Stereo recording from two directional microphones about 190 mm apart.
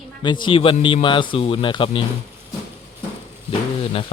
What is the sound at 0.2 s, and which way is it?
Speech, 25° left (ahead or behind).